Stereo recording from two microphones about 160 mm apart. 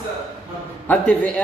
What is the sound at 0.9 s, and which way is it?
Speech, 10° left (ahead or behind).